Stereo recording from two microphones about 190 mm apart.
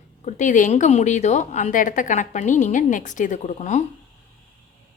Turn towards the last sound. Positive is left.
turn(degrees=40)  # may be behind; listen again after turning